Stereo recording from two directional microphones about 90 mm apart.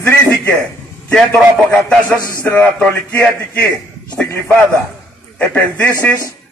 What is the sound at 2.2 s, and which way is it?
Speech, 30° right (ahead or behind).